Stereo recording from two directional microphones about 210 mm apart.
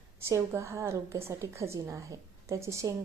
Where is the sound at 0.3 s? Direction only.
15° right (ahead or behind).